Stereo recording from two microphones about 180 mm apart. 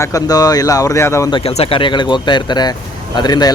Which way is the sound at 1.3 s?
30° left (ahead or behind).